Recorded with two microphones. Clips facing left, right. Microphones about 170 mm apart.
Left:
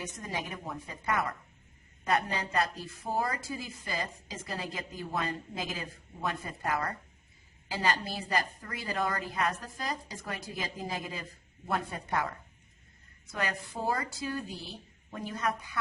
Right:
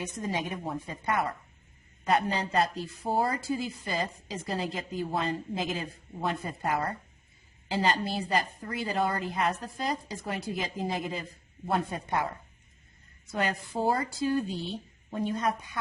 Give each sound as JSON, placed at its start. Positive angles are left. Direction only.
{"t": 0.0, "sound": "a woman's voice", "side_deg": -25}
{"t": 13.3, "sound": "a woman's voice", "side_deg": -30}